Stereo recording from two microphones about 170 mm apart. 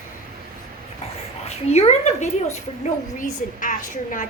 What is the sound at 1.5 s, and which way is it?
A woman's voice, 40° left (ahead or behind).